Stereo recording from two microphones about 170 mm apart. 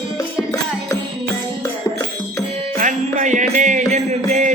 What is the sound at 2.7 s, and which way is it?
Music, 50° right (ahead or behind).